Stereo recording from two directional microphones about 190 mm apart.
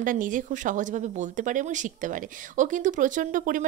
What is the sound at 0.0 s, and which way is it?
Speech, 45° right (ahead or behind).